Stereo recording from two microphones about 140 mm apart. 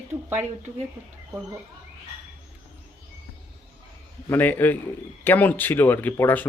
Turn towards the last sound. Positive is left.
turn(degrees=15)  # may be behind; listen again after turning